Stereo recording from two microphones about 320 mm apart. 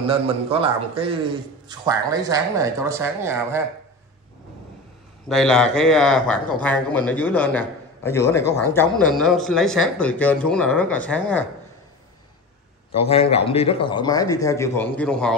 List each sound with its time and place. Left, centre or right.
0.0 s speech: centre
5.3 s speech: centre
12.9 s a man's voice: centre